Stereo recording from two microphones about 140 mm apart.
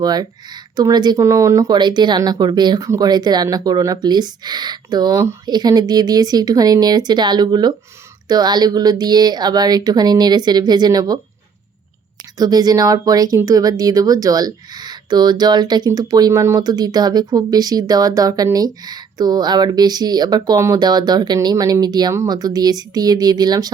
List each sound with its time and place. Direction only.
0.0 s speech: 30° right (ahead or behind)
12.4 s speech: 30° right (ahead or behind)